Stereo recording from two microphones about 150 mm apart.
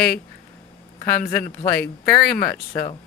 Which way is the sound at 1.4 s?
70° left (ahead or behind).